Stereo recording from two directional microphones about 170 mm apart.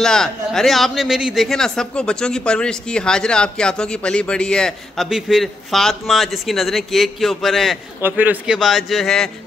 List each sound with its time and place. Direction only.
0.0 s a man's voice: 5° left (ahead or behind)
8.0 s a man's voice: 10° right (ahead or behind)